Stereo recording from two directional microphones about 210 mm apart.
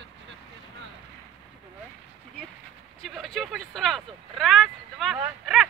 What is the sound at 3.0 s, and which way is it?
Vehicle, centre (ahead or behind).